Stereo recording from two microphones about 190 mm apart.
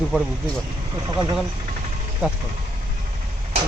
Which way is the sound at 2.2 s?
5° right (ahead or behind).